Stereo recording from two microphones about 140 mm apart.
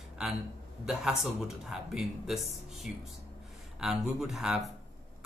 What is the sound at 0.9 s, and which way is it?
Speech, 5° right (ahead or behind).